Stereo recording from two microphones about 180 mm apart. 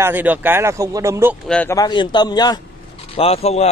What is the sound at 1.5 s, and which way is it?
Speech, 10° left (ahead or behind).